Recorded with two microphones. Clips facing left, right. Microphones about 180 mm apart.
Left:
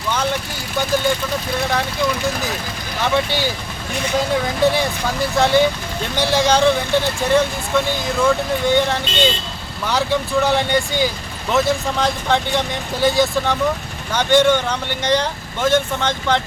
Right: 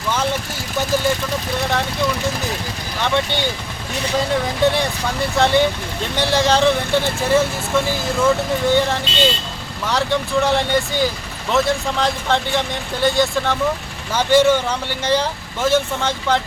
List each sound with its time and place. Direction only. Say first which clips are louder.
3.0 s speech: left 1 dB; 5° left (ahead or behind)
4.6 s speech: left 1 dB; centre (ahead or behind)